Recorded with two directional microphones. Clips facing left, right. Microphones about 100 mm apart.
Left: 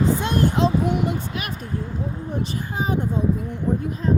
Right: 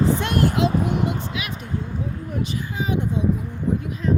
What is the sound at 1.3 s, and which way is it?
Speech, 45° left (ahead or behind).